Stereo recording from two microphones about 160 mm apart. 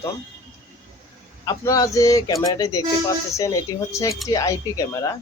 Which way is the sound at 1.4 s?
25° left (ahead or behind).